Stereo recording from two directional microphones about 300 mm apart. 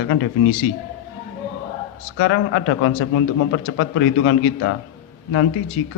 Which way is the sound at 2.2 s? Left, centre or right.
Left.